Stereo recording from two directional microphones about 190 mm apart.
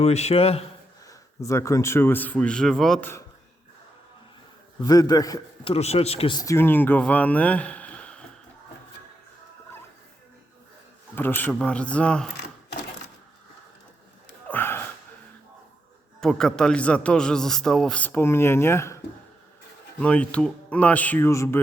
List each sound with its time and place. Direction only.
0.0 s a man's voice: 35° left (ahead or behind)
1.0 s speech: 15° left (ahead or behind)
4.8 s a man's voice: 20° left (ahead or behind)
5.7 s speech: 35° left (ahead or behind); by 8.2 s 5° left (ahead or behind)
11.1 s speech: 10° left (ahead or behind)
14.4 s gasp: 10° left (ahead or behind)
16.2 s a man's voice: 5° left (ahead or behind)
20.0 s speech: 5° left (ahead or behind)